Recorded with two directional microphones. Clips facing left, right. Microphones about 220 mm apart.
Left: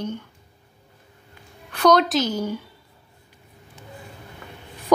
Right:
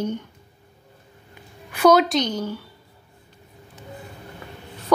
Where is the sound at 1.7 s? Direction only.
5° right (ahead or behind); by 2.6 s 10° left (ahead or behind).